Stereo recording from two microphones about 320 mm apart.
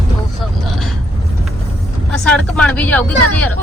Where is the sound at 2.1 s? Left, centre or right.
Centre.